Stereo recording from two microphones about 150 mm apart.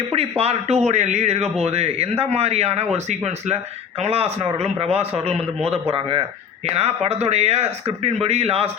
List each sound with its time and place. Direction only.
0.1 s a man's voice: 40° right (ahead or behind)